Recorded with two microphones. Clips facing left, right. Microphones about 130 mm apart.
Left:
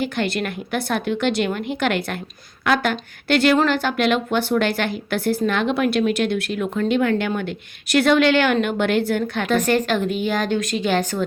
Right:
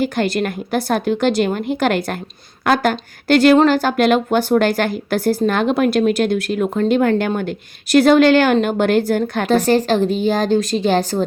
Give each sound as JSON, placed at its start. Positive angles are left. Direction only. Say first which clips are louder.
{"t": 0.0, "sound": "speech", "louder": "right 5 dB", "side_deg": -40}